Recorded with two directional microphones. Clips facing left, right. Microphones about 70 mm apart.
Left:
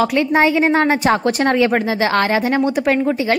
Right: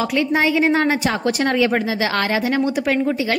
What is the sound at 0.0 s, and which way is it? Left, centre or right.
Speech, left.